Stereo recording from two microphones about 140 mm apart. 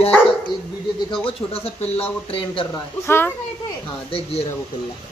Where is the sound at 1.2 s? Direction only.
45° left (ahead or behind).